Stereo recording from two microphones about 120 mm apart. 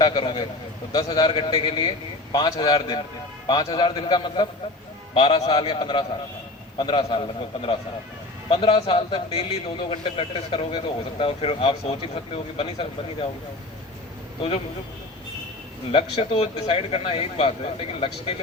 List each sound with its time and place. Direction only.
0.0 s a man's voice: 40° left (ahead or behind)
0.9 s a man's voice: 35° left (ahead or behind); by 13.2 s 50° left (ahead or behind)
15.9 s a man's voice: 50° left (ahead or behind)